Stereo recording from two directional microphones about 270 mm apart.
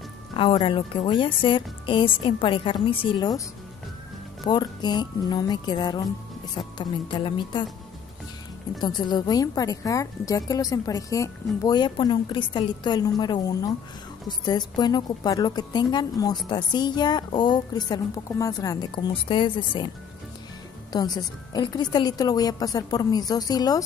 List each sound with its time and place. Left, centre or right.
0.4 s a woman's voice: centre
4.5 s a woman's voice: centre
8.8 s a woman's voice: centre
20.9 s a woman's voice: centre